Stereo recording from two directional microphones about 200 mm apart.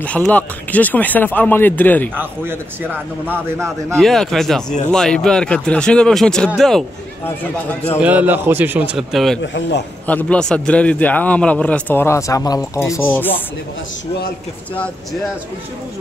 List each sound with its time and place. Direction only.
0.0 s a man's voice: 5° left (ahead or behind)
2.1 s a man's voice: 10° right (ahead or behind)
3.6 s speech: centre (ahead or behind)
8.0 s a man's voice: 5° right (ahead or behind)
9.4 s a man's voice: 60° left (ahead or behind)
10.0 s a man's voice: 5° left (ahead or behind)